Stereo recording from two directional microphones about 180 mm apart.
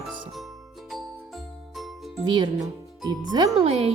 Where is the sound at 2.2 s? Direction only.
25° right (ahead or behind).